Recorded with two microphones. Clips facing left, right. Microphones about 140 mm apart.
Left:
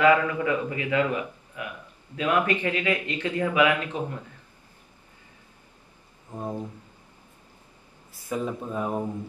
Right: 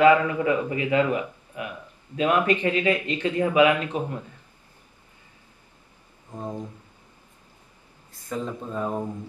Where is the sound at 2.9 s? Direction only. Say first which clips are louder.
Right 2 dB; 15° right (ahead or behind).